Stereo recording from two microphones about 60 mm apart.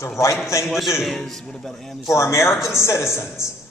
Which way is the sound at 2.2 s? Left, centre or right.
Left.